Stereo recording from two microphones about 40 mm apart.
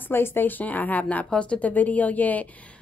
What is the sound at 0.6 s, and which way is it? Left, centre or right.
A woman's voice, left.